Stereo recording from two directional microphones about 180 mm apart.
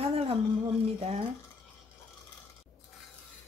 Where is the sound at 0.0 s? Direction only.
35° right (ahead or behind).